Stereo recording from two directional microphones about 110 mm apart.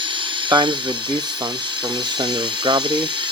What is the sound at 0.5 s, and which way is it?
Speech, 40° right (ahead or behind).